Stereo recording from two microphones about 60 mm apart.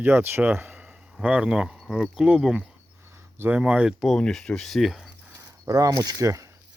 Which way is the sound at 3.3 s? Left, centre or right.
Right.